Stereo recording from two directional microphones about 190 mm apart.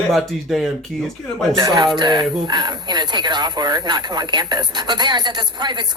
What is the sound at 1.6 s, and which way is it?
Speech, 20° right (ahead or behind).